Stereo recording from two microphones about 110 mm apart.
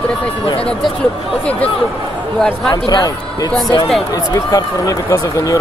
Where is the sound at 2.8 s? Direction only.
40° left (ahead or behind).